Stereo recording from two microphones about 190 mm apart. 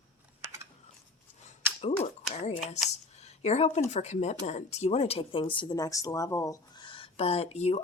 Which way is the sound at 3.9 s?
35° left (ahead or behind).